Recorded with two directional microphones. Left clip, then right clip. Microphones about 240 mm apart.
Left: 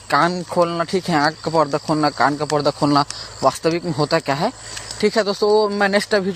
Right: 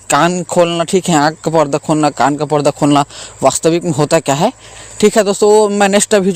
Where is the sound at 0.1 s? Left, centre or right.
Right.